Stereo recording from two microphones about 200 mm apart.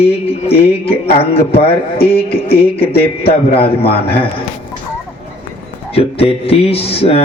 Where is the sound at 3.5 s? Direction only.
30° left (ahead or behind).